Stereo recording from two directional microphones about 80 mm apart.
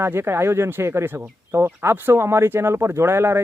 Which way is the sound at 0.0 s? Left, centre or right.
Right.